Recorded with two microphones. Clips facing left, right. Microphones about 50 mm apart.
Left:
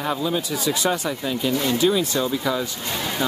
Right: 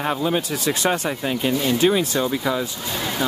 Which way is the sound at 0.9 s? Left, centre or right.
Right.